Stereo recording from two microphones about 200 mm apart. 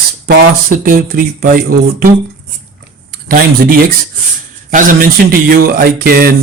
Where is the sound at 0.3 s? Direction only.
45° right (ahead or behind).